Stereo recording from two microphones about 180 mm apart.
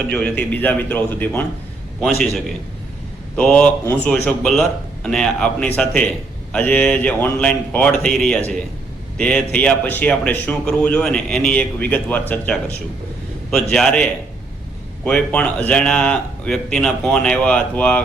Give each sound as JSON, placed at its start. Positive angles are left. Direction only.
{"t": 0.1, "sound": "a man's voice", "side_deg": 5}